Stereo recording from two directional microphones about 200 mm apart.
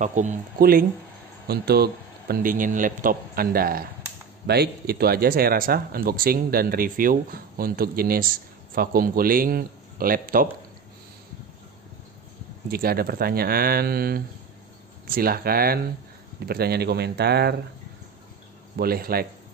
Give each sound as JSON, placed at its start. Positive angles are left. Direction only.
{"t": 0.0, "sound": "speech", "side_deg": -40}
{"t": 12.6, "sound": "speech", "side_deg": -50}
{"t": 18.8, "sound": "speech", "side_deg": -50}